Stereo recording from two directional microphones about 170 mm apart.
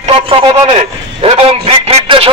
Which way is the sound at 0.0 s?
35° right (ahead or behind).